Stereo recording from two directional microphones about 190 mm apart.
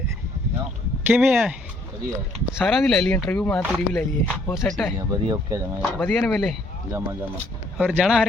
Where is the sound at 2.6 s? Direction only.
Centre (ahead or behind).